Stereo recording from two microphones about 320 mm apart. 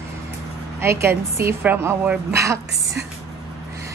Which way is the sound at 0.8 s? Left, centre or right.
Centre.